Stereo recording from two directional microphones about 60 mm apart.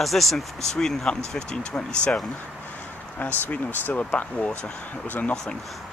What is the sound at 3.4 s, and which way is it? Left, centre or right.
Speech, left.